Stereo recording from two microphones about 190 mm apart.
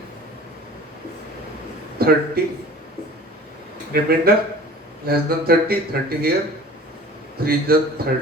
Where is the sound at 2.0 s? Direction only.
55° right (ahead or behind).